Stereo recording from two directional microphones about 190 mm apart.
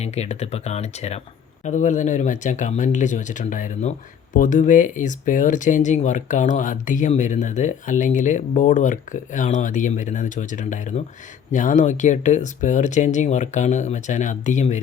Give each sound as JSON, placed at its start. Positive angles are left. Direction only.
{"t": 0.0, "sound": "speech", "side_deg": 35}